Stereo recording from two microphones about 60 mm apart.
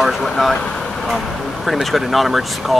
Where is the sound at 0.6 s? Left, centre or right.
Centre.